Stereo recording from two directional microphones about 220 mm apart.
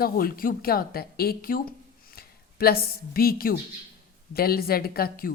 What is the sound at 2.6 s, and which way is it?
A woman's voice, 45° left (ahead or behind).